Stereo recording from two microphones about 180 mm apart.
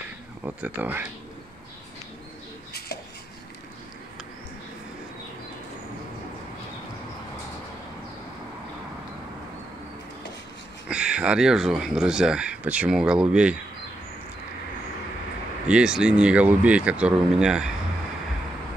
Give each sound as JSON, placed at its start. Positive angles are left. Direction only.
{"t": 0.5, "sound": "speech", "side_deg": -10}
{"t": 10.9, "sound": "speech", "side_deg": -5}
{"t": 15.7, "sound": "speech", "side_deg": -5}